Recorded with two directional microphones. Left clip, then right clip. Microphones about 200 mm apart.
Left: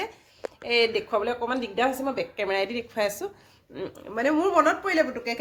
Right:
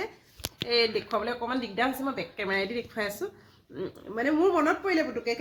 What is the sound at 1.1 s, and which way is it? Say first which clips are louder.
Speech: left 4 dB; 15° left (ahead or behind).